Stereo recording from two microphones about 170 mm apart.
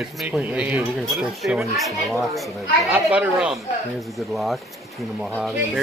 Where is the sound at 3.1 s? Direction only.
5° right (ahead or behind).